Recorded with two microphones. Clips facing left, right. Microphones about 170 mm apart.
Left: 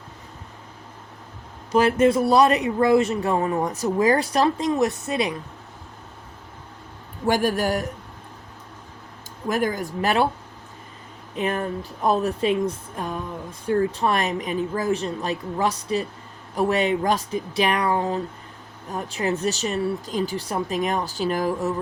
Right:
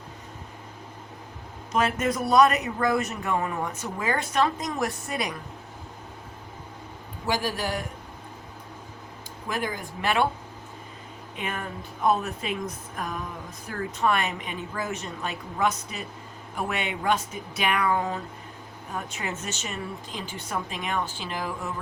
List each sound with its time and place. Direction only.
1.7 s speech: 30° left (ahead or behind)
7.3 s speech: 50° left (ahead or behind)
9.5 s speech: 45° left (ahead or behind)
11.3 s speech: 35° left (ahead or behind)